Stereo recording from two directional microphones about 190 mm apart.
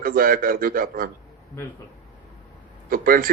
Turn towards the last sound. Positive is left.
turn(degrees=-50)  # may be behind; listen again after turning